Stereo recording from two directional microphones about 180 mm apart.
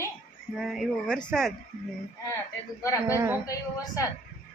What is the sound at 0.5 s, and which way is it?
Speech, centre (ahead or behind).